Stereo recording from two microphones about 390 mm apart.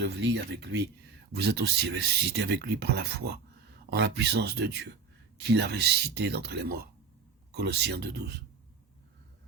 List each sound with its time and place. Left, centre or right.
0.3 s speech: right